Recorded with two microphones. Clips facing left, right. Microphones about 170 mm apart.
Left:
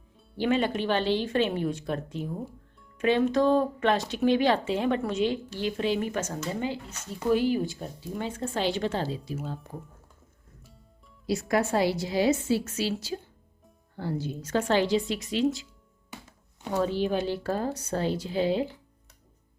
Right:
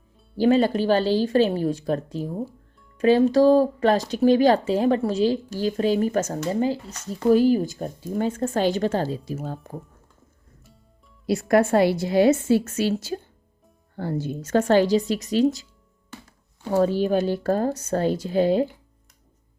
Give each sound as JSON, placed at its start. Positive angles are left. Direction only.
{"t": 0.3, "sound": "speech", "side_deg": -35}
{"t": 11.3, "sound": "speech", "side_deg": -55}
{"t": 16.7, "sound": "speech", "side_deg": -45}